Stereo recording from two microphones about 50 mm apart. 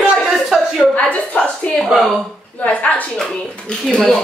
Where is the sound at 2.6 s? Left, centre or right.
Left.